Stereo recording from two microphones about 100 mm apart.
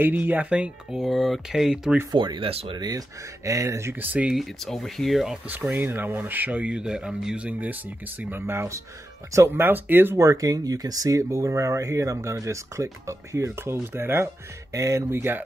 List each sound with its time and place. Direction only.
0.0 s speech: 15° right (ahead or behind)
1.0 s speech: centre (ahead or behind)
2.1 s speech: 50° right (ahead or behind)
3.4 s speech: 30° right (ahead or behind)
4.1 s speech: 15° right (ahead or behind)
4.4 s speech: 5° left (ahead or behind)
5.8 s speech: 20° right (ahead or behind)
8.2 s speech: 20° right (ahead or behind)